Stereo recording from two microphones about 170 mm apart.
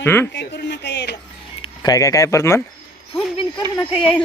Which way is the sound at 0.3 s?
80° left.